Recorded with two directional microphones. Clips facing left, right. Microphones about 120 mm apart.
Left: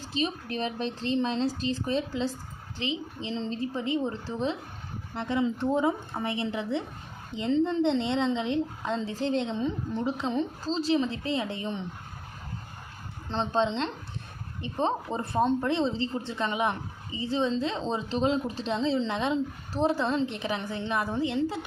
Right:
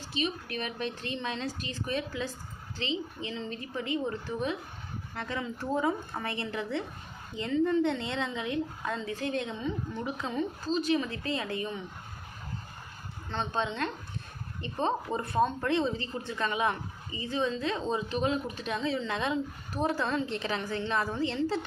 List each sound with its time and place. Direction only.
0.1 s speech: 35° left (ahead or behind)
13.2 s speech: 30° left (ahead or behind)